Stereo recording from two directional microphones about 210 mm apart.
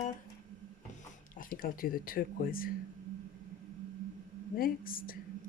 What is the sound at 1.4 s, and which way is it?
Speech, 40° left (ahead or behind).